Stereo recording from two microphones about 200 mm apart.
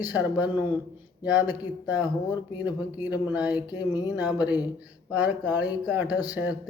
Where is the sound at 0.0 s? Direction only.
10° right (ahead or behind).